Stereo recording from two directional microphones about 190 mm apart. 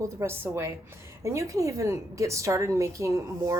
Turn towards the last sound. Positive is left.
turn(degrees=-15)  # may be behind; listen again after turning